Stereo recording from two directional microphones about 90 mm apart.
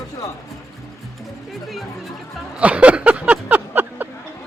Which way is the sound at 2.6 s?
15° right (ahead or behind).